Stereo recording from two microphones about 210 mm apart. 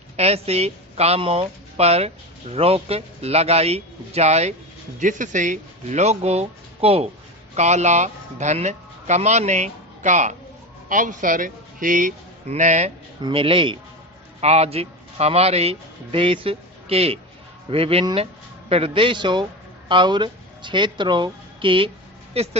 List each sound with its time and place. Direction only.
0.2 s a woman's voice: 30° right (ahead or behind)